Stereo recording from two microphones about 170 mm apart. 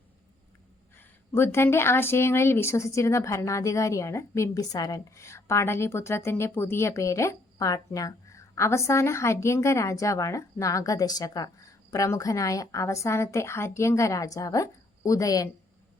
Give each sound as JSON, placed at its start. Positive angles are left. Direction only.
{"t": 0.9, "sound": "speech", "side_deg": 15}